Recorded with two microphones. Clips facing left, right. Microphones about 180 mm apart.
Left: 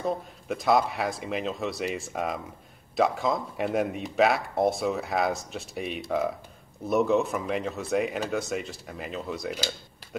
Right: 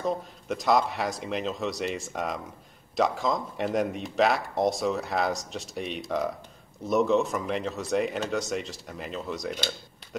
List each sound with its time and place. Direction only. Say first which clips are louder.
0.0 s speech: even; centre (ahead or behind)